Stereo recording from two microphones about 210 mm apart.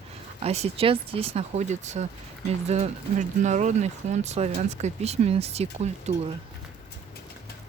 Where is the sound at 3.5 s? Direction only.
35° right (ahead or behind).